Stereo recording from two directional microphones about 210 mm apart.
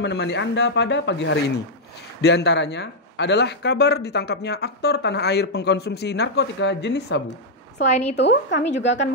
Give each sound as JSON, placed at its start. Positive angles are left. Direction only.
{"t": 0.0, "sound": "speech", "side_deg": 55}
{"t": 7.8, "sound": "a woman's voice", "side_deg": 35}
{"t": 8.2, "sound": "speech", "side_deg": 55}